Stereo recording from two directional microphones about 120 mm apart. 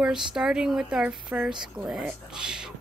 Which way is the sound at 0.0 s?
5° right (ahead or behind).